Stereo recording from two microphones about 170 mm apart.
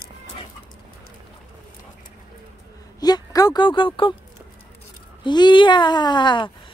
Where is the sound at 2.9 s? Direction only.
25° left (ahead or behind).